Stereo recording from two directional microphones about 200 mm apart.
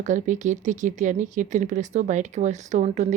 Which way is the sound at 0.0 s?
40° right (ahead or behind).